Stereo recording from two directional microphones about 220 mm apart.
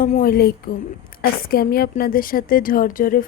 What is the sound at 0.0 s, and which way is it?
A woman's voice, 40° left (ahead or behind).